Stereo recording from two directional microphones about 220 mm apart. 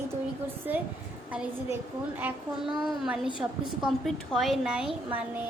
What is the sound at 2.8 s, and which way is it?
A woman's voice, centre (ahead or behind).